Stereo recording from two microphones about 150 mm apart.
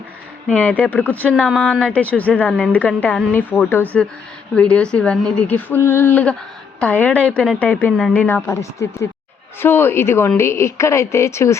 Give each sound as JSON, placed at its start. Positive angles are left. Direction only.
{"t": 0.4, "sound": "speech", "side_deg": 10}